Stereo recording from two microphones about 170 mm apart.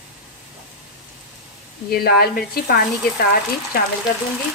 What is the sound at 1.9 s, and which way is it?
Speech, 65° left (ahead or behind).